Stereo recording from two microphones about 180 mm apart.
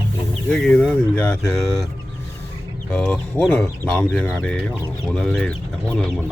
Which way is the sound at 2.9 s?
10° left (ahead or behind).